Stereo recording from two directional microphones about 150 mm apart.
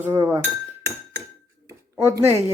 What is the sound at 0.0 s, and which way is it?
Speech, 15° right (ahead or behind).